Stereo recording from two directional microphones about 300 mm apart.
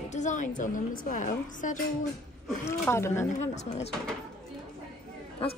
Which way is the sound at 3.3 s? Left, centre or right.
Left.